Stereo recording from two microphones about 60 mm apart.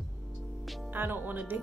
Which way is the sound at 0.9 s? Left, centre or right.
Right.